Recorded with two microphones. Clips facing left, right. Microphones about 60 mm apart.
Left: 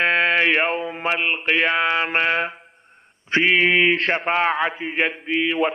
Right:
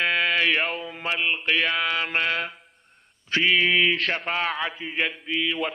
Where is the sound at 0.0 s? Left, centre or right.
Left.